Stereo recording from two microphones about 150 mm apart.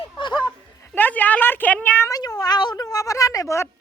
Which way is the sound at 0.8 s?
10° left (ahead or behind).